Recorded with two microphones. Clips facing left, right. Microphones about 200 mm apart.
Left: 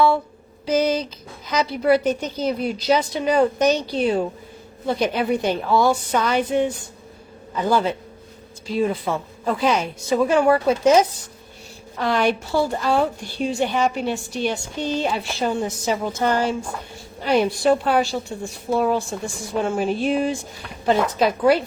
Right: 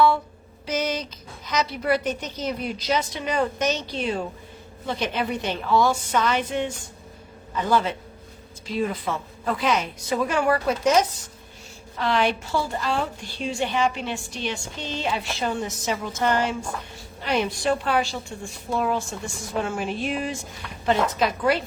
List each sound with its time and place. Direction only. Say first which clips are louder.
0.6 s a woman's voice: left 7 dB; 30° left (ahead or behind)
11.9 s a woman's voice: left 3 dB; 45° left (ahead or behind)